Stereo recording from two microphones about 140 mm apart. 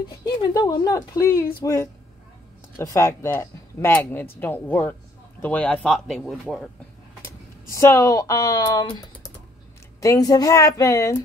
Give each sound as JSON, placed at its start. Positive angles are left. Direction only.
{"t": 0.1, "sound": "speech", "side_deg": 25}
{"t": 7.2, "sound": "speech", "side_deg": 20}